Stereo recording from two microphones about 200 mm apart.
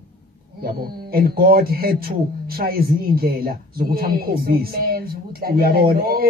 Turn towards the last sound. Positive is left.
turn(degrees=-50)  # may be behind; listen again after turning